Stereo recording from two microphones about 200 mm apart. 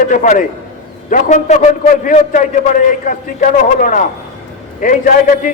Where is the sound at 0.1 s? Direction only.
40° left (ahead or behind).